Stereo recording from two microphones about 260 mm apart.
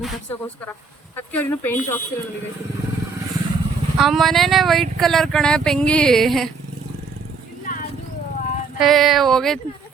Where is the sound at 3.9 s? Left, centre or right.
Centre.